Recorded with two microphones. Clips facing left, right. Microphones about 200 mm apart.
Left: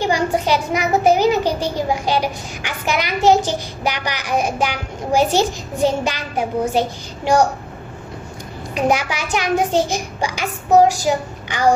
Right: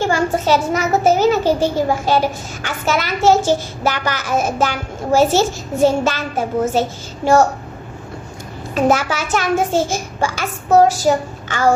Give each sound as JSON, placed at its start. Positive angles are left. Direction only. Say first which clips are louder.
{"t": 0.0, "sound": "a child's voice", "louder": "right 1 dB", "side_deg": 15}
{"t": 8.7, "sound": "a child's voice", "louder": "right 3 dB", "side_deg": 15}